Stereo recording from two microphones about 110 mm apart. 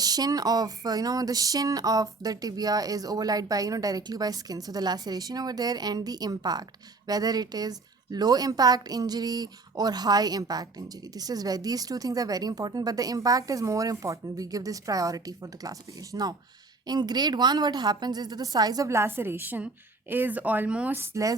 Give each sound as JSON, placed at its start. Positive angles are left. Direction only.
{"t": 0.0, "sound": "a woman's voice", "side_deg": -35}